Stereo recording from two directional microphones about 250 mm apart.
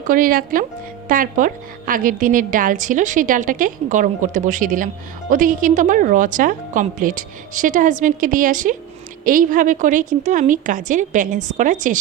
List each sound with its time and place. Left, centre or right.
0.1 s a woman's voice: right